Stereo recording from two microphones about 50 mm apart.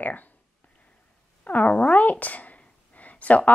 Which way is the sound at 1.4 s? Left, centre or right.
Left.